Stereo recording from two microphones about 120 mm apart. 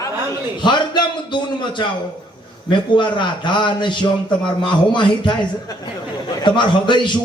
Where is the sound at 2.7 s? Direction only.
40° left (ahead or behind).